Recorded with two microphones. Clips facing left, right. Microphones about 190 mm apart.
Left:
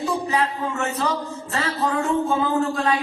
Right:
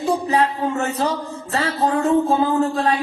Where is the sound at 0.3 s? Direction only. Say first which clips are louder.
Right 4 dB; 35° right (ahead or behind).